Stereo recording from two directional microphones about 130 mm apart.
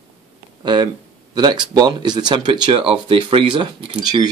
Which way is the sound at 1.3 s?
35° right (ahead or behind).